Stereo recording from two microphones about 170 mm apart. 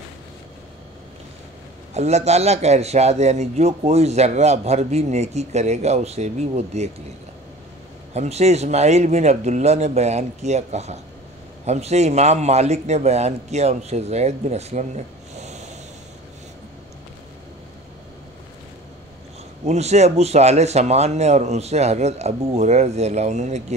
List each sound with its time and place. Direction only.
2.0 s a man's voice: 40° right (ahead or behind)
8.1 s a man's voice: 40° right (ahead or behind)
19.6 s a man's voice: 40° right (ahead or behind)